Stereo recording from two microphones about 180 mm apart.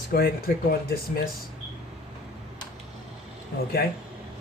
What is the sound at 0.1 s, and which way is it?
Speech, 55° left (ahead or behind).